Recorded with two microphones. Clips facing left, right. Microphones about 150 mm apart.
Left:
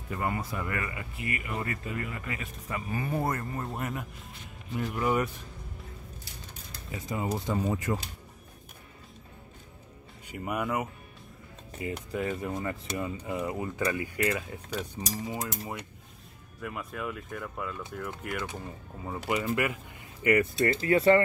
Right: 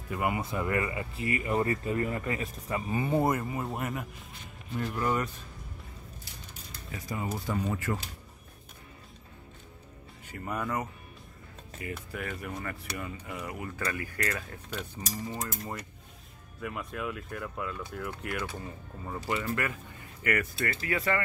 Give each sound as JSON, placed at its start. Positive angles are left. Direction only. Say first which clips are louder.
{"t": 0.2, "sound": "speech", "louder": "right 2 dB", "side_deg": -20}
{"t": 2.9, "sound": "speech", "louder": "right 4 dB", "side_deg": -25}
{"t": 3.4, "sound": "speech", "louder": "right 1 dB", "side_deg": -5}
{"t": 4.7, "sound": "mechanisms", "louder": "left 2 dB", "side_deg": 5}
{"t": 7.0, "sound": "speech", "louder": "left 3 dB", "side_deg": 20}
{"t": 10.2, "sound": "mechanisms", "louder": "left 3 dB", "side_deg": 15}
{"t": 11.8, "sound": "speech", "louder": "left 5 dB", "side_deg": 20}
{"t": 13.8, "sound": "mechanisms", "louder": "left 5 dB", "side_deg": 15}
{"t": 16.6, "sound": "speech", "louder": "even", "side_deg": 0}
{"t": 19.2, "sound": "speech", "louder": "left 3 dB", "side_deg": 15}